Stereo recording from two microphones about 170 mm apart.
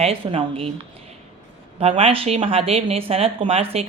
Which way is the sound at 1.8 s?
35° right (ahead or behind).